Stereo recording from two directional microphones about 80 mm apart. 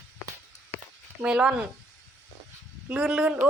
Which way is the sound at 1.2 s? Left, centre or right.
Centre.